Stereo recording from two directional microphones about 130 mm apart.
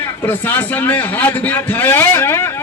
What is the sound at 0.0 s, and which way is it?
A man's voice, 20° left (ahead or behind).